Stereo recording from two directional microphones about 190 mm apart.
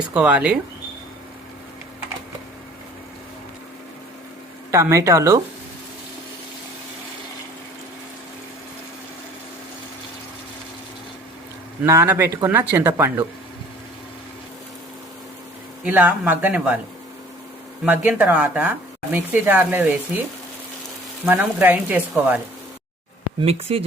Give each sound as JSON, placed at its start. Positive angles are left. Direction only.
{"t": 0.1, "sound": "speech", "side_deg": -5}
{"t": 4.7, "sound": "speech", "side_deg": -15}
{"t": 11.8, "sound": "speech", "side_deg": -10}
{"t": 15.8, "sound": "speech", "side_deg": -5}
{"t": 17.8, "sound": "speech", "side_deg": -10}
{"t": 21.2, "sound": "speech", "side_deg": -10}
{"t": 23.4, "sound": "speech", "side_deg": -30}